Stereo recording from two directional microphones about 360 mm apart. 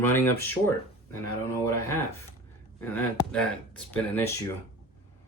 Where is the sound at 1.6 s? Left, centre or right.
Centre.